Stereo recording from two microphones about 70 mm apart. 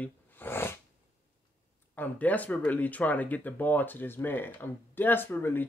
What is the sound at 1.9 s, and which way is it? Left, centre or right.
Speech, left.